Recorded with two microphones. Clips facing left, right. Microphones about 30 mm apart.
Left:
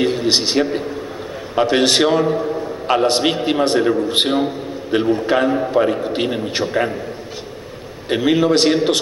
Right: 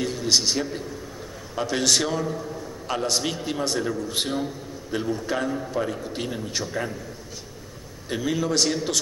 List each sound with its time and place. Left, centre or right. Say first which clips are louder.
0.0 s a man's voice: left 6 dB; left
8.1 s a man's voice: left 10 dB; left